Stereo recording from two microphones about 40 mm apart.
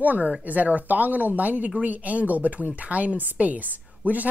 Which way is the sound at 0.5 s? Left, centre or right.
Right.